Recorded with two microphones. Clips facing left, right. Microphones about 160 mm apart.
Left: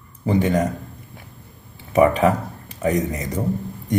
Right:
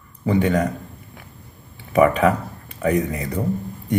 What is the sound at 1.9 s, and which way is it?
Speech, 40° left (ahead or behind).